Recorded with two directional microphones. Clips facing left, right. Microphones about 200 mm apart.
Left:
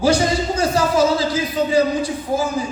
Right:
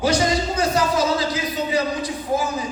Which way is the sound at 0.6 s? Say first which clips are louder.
Left 5 dB; 30° left (ahead or behind).